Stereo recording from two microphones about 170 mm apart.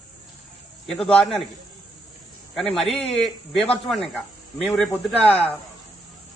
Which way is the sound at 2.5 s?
Centre (ahead or behind).